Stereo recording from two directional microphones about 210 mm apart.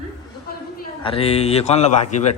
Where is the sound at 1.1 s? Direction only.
25° left (ahead or behind).